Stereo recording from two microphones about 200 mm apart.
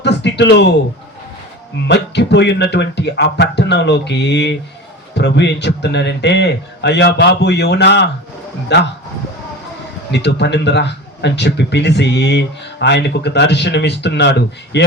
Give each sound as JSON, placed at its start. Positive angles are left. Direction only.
{"t": 0.0, "sound": "a sound", "side_deg": 60}
{"t": 1.9, "sound": "speech", "side_deg": 60}
{"t": 10.1, "sound": "speech", "side_deg": 60}